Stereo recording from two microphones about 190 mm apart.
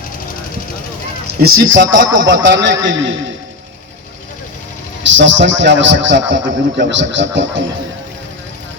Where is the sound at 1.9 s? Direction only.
80° right.